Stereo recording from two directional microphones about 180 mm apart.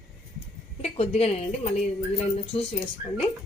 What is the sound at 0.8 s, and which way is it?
Speech, 35° left (ahead or behind).